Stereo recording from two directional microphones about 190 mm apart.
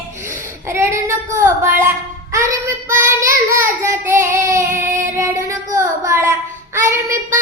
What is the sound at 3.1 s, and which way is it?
Child singing, 15° right (ahead or behind).